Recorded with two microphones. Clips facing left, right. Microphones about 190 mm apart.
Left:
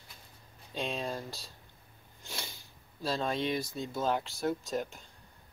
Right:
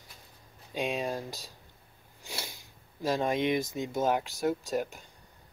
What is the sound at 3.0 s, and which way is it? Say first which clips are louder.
Speech: right 4 dB; 15° right (ahead or behind).